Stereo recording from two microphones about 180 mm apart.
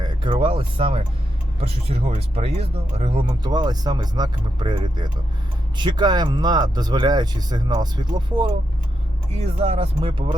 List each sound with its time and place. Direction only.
0.0 s speech: 25° right (ahead or behind)
9.4 s speech: 35° right (ahead or behind)